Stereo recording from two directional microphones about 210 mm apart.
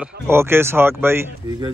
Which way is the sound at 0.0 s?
10° right (ahead or behind).